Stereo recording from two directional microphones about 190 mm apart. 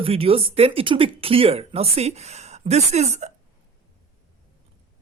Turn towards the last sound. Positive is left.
turn(degrees=-35)  # may be behind; listen again after turning